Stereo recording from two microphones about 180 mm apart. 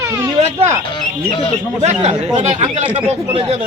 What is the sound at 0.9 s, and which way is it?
Speech, 30° left (ahead or behind).